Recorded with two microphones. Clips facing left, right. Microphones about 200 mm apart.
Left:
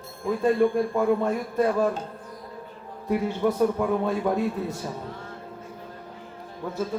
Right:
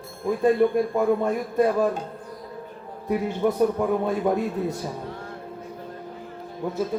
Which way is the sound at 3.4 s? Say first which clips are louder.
Right 1 dB; 5° right (ahead or behind).